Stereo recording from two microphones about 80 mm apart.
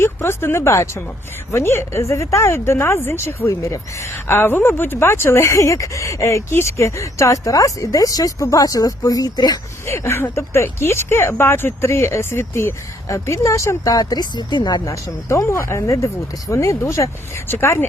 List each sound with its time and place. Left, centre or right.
0.0 s a woman's voice: left
9.8 s a woman's voice: left
14.0 s speech: left
14.8 s a woman's voice: left